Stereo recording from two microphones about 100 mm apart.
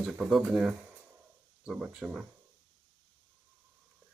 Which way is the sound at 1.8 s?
10° right (ahead or behind).